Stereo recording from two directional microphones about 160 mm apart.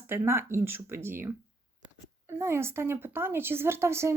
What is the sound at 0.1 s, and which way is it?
A woman's voice, 15° right (ahead or behind).